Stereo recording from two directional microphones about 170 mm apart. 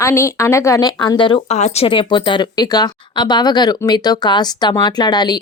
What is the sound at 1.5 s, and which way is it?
A woman's voice, 40° left (ahead or behind).